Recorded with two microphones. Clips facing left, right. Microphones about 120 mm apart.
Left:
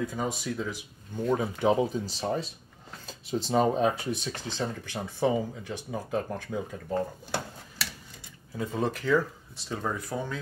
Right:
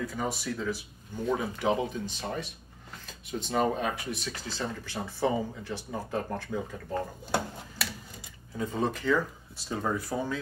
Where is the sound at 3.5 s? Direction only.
30° left (ahead or behind); by 6.4 s 10° left (ahead or behind).